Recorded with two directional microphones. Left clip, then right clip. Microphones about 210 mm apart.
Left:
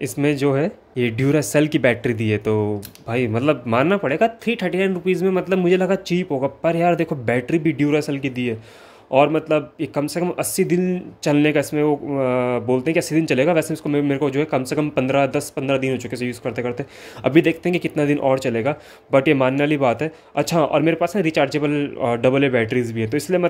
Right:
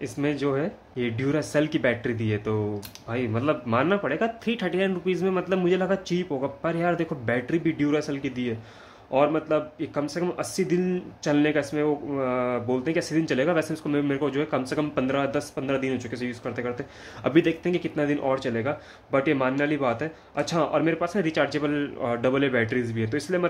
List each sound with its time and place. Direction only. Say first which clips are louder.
0.0 s speech: left 7 dB; 40° left (ahead or behind)